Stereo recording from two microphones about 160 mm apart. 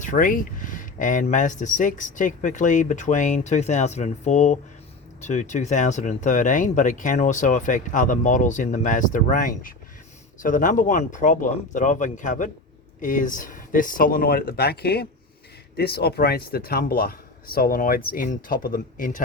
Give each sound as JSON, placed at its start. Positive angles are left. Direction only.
{"t": 0.0, "sound": "speech", "side_deg": 55}